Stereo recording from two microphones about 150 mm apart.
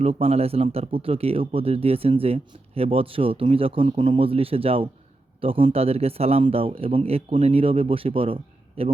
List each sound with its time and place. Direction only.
0.0 s speech: 40° right (ahead or behind)